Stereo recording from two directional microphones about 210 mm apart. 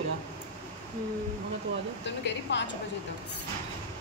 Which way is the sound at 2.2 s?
55° left (ahead or behind).